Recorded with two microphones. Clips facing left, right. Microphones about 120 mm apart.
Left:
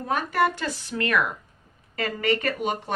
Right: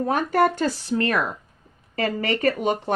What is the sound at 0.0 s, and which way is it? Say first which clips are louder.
Speech: right 4 dB; 40° right (ahead or behind).